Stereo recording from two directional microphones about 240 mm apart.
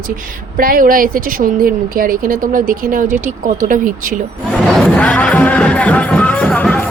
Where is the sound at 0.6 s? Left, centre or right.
Right.